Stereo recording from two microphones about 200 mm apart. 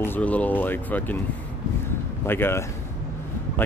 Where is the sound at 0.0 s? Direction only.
10° left (ahead or behind).